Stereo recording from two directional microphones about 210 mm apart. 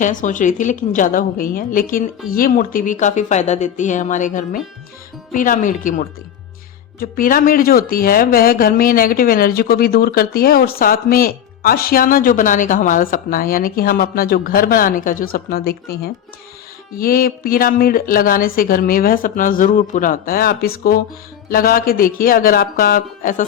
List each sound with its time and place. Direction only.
0.0 s speech: 35° left (ahead or behind)
17.0 s speech: 45° left (ahead or behind)